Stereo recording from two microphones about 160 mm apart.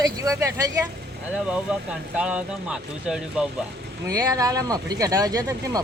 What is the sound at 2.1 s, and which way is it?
Speech, 5° right (ahead or behind).